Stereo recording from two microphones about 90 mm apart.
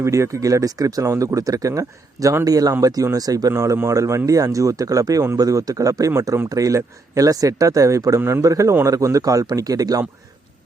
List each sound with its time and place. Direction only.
0.0 s speech: 35° right (ahead or behind)